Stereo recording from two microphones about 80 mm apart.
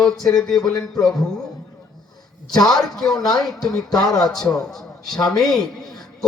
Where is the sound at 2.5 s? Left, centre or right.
Centre.